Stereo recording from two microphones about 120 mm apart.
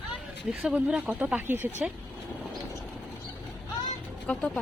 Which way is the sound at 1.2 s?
15° right (ahead or behind).